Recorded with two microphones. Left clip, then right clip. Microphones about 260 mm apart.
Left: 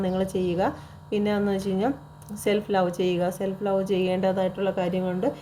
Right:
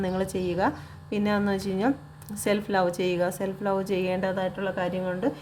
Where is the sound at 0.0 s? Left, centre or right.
Right.